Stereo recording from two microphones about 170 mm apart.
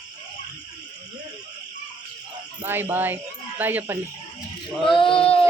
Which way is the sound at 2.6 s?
10° right (ahead or behind).